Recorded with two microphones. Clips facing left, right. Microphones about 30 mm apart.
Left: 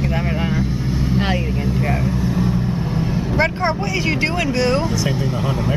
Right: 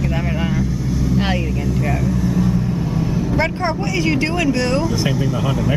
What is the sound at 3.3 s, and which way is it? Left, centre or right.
Speech, centre.